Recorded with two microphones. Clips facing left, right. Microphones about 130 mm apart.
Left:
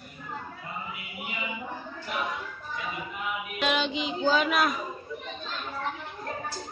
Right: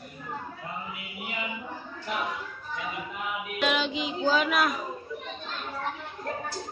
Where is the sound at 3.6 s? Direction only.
Centre (ahead or behind).